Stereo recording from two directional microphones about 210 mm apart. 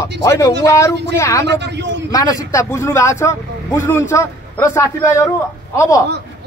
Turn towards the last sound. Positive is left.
turn(degrees=15)  # may be behind; listen again after turning